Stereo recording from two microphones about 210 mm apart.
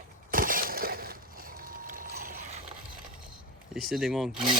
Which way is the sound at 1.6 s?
40° right (ahead or behind).